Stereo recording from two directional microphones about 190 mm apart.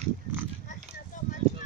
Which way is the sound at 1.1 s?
40° left (ahead or behind).